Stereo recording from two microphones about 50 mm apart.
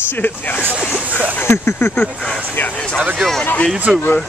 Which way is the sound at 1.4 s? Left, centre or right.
Left.